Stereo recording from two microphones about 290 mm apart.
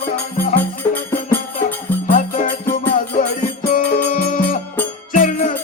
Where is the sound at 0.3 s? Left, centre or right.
Left.